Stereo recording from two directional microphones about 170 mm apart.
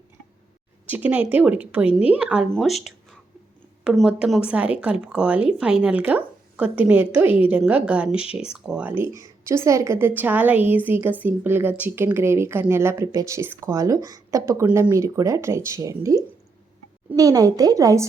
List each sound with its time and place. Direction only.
0.9 s speech: 10° right (ahead or behind)
8.2 s speech: 35° left (ahead or behind)
8.5 s a woman's voice: 5° right (ahead or behind); by 18.0 s 20° right (ahead or behind)